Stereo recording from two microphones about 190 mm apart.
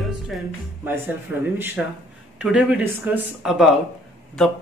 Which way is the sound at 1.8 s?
5° right (ahead or behind).